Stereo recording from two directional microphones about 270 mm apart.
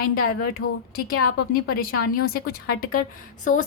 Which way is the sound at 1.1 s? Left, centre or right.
Left.